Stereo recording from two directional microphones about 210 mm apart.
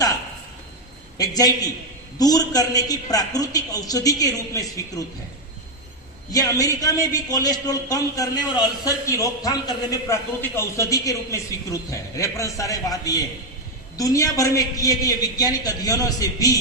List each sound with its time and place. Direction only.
1.2 s a man's voice: 15° left (ahead or behind)
6.3 s a man's voice: 15° left (ahead or behind)